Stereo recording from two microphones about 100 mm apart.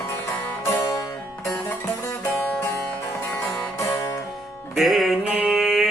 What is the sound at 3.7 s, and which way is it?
Music, 30° left (ahead or behind).